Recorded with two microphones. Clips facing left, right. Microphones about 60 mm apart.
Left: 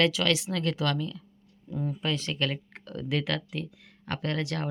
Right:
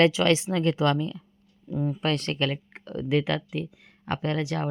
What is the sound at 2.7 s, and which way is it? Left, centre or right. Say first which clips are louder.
Speech: right 5 dB; right.